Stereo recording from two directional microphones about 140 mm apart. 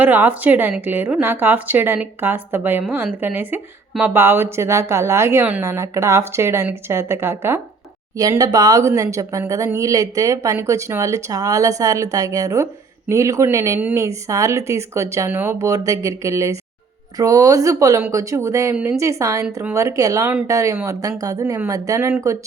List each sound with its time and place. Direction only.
0.0 s speech: 10° right (ahead or behind)